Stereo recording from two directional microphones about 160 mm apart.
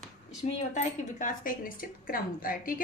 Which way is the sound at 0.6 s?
50° left (ahead or behind).